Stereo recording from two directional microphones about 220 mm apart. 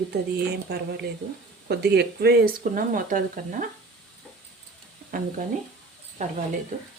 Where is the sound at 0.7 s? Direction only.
45° right (ahead or behind).